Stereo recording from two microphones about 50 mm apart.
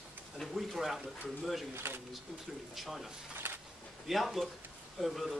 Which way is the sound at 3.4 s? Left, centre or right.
Right.